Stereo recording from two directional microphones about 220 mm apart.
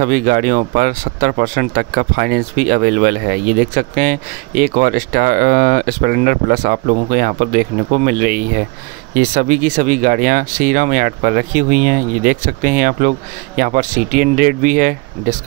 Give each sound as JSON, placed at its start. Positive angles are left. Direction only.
{"t": 0.0, "sound": "speech", "side_deg": -40}